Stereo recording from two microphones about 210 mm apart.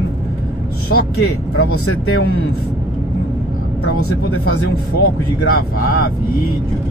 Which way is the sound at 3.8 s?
90° left.